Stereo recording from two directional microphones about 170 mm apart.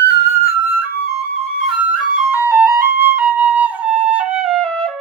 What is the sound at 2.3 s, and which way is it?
Flute, 10° right (ahead or behind).